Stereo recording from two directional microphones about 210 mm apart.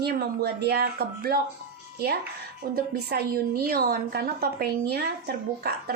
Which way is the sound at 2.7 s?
45° right (ahead or behind).